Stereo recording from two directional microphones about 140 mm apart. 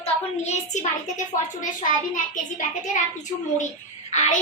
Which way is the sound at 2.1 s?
60° left (ahead or behind).